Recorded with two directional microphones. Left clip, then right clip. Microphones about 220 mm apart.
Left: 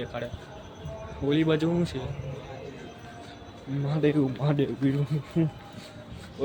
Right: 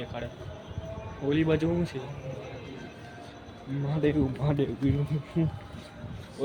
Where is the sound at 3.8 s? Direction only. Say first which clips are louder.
Left 2 dB; 10° left (ahead or behind).